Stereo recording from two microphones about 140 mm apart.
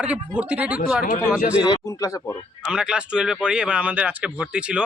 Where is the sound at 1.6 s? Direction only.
25° left (ahead or behind).